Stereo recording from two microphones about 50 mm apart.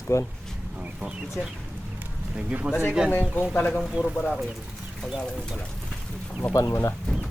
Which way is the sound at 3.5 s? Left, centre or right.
Left.